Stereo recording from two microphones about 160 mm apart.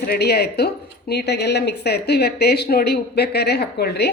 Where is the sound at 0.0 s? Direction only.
85° left.